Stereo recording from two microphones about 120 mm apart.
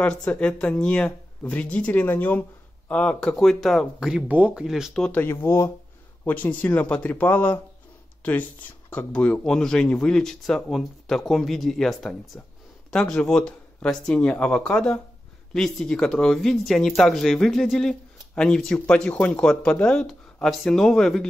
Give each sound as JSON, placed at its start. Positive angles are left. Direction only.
{"t": 0.0, "sound": "speech", "side_deg": 10}
{"t": 5.0, "sound": "speech", "side_deg": 15}